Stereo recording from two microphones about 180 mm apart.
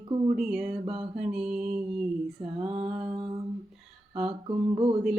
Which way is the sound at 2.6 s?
30° right (ahead or behind).